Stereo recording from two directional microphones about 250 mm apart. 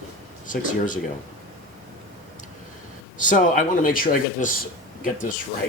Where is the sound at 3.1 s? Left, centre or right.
Left.